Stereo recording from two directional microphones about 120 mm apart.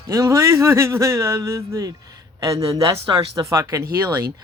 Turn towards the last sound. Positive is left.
turn(degrees=-25)  # may be behind; listen again after turning